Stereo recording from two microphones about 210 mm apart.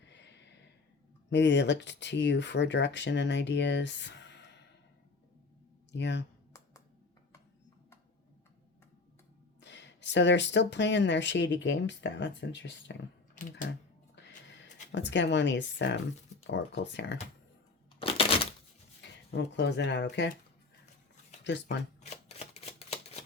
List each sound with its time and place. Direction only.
0.1 s a sound: 55° left (ahead or behind)
1.3 s speech: 55° left (ahead or behind)
5.9 s speech: 55° left (ahead or behind)
9.6 s speech: 55° left (ahead or behind)
14.9 s speech: 55° left (ahead or behind)
18.0 s a sound: 25° left (ahead or behind)
19.0 s speech: 55° left (ahead or behind)
21.4 s speech: 55° left (ahead or behind)
22.1 s shuffling cards: 30° left (ahead or behind)